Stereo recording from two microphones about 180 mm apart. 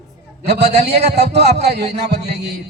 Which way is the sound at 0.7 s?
65° right (ahead or behind).